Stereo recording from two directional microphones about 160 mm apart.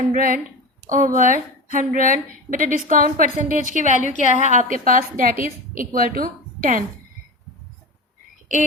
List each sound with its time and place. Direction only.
0.0 s a woman's voice: 55° right (ahead or behind)